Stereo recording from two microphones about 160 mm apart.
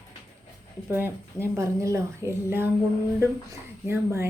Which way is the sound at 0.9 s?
15° right (ahead or behind).